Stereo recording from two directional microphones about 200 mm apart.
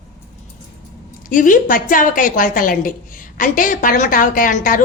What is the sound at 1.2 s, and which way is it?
A woman's voice, 40° left (ahead or behind).